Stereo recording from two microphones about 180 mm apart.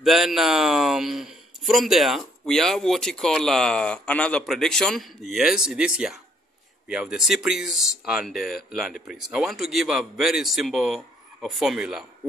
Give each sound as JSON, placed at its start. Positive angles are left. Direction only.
{"t": 0.0, "sound": "speech", "side_deg": 0}